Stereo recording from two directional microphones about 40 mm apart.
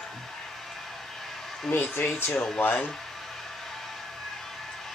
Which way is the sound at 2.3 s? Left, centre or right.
Left.